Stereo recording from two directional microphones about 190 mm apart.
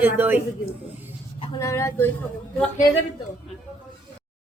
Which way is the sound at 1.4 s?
15° left (ahead or behind).